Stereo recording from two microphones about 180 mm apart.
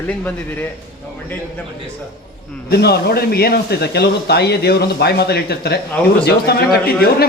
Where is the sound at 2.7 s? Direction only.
60° left (ahead or behind).